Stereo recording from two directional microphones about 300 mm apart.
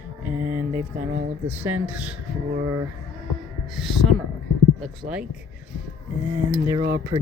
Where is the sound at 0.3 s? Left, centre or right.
Centre.